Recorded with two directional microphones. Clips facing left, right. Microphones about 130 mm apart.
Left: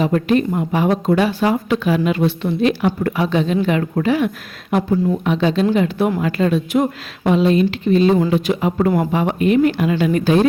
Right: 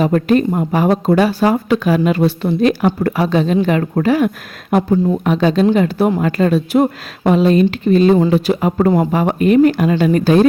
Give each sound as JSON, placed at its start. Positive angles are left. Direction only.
{"t": 0.0, "sound": "speech", "side_deg": -45}